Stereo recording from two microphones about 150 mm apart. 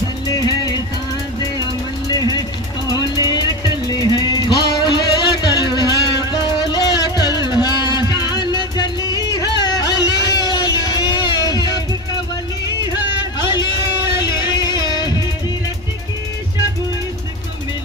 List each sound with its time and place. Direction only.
0.3 s music: 25° left (ahead or behind)
2.9 s music: 30° left (ahead or behind)
13.4 s a sound: 30° left (ahead or behind)
14.3 s music: 30° left (ahead or behind)